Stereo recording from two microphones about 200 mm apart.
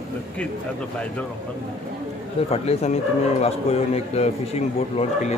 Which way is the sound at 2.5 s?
30° left (ahead or behind).